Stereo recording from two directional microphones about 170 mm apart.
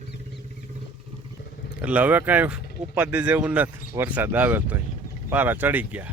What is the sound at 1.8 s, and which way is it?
Speech, 10° right (ahead or behind).